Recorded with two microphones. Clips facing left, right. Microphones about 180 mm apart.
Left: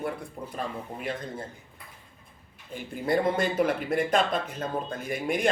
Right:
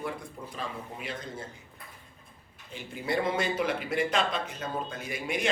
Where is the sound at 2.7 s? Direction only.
50° left (ahead or behind).